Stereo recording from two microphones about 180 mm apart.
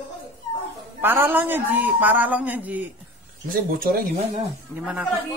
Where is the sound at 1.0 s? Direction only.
10° right (ahead or behind).